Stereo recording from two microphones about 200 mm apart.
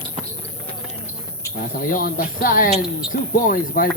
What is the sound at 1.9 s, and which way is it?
Speech, 45° left (ahead or behind).